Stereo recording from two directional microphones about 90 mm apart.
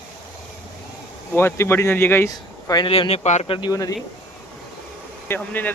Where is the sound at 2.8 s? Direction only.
80° left.